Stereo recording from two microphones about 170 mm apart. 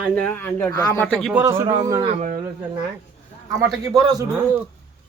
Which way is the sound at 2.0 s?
40° right (ahead or behind).